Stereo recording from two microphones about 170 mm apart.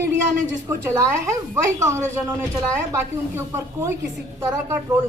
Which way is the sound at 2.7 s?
15° right (ahead or behind).